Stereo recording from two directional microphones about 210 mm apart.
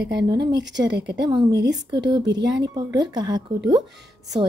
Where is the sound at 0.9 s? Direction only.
55° right (ahead or behind).